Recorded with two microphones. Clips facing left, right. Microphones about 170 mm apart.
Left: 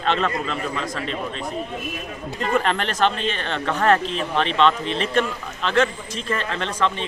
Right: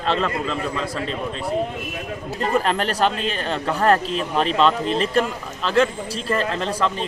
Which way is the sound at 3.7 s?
35° right (ahead or behind).